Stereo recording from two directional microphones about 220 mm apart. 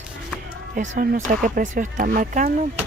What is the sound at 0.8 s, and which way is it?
Speech, 35° right (ahead or behind).